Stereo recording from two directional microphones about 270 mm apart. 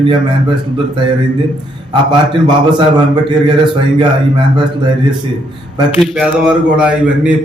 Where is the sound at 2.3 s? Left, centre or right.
Centre.